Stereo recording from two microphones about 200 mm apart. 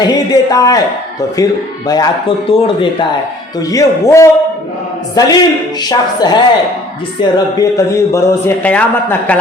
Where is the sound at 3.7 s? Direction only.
15° left (ahead or behind).